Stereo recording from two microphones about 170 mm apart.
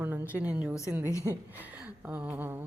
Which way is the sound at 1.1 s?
15° left (ahead or behind).